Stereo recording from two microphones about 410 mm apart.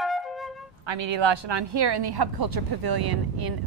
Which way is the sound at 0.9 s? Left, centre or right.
Right.